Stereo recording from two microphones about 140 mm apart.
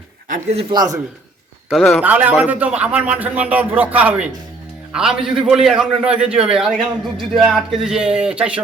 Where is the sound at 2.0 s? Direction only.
10° right (ahead or behind).